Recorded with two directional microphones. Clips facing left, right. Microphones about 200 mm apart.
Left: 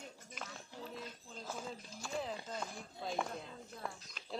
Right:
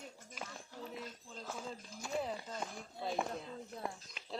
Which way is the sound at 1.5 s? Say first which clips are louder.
Even; 5° right (ahead or behind).